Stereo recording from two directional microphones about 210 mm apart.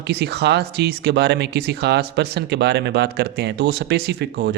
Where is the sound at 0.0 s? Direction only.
50° right (ahead or behind).